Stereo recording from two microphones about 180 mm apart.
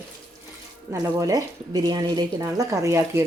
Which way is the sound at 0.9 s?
20° right (ahead or behind).